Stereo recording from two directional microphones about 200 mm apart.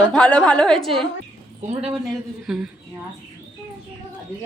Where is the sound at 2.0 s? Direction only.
5° right (ahead or behind).